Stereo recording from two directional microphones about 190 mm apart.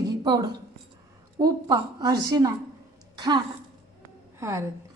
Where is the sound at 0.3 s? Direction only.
20° right (ahead or behind).